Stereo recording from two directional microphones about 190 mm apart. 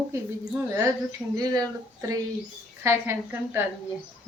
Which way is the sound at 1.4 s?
20° right (ahead or behind).